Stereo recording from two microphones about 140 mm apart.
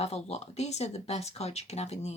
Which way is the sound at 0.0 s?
50° left (ahead or behind).